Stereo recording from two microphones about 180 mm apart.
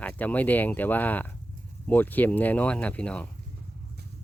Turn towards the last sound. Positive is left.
turn(degrees=5)  # may be behind; listen again after turning